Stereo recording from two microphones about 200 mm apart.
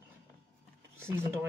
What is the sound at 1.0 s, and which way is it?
Speech, 10° right (ahead or behind).